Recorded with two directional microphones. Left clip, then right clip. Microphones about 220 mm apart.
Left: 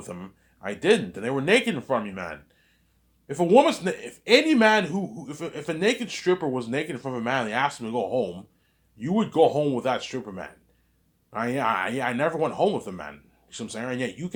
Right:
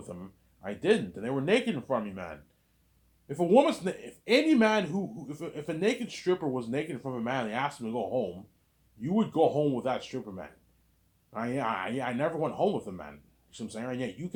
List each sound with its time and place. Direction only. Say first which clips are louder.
0.0 s speech: left 5 dB; 25° left (ahead or behind)